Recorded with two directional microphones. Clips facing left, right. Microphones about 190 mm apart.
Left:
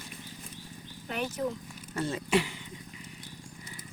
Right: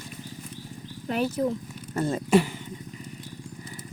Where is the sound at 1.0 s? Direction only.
40° right (ahead or behind).